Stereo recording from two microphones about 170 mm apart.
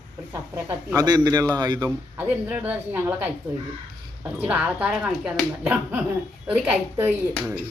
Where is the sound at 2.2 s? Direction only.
10° right (ahead or behind).